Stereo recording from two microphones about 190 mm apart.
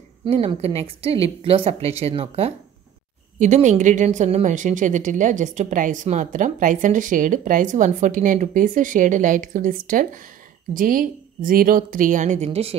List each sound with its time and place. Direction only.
0.2 s a woman's voice: 30° right (ahead or behind)